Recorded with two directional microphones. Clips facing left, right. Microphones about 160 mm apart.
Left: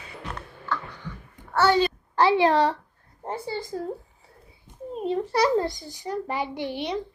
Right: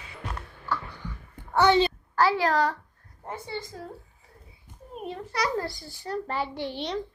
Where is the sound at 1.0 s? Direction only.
10° right (ahead or behind).